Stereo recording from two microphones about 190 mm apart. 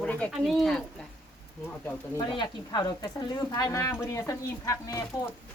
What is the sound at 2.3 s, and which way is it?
Speech, 25° left (ahead or behind).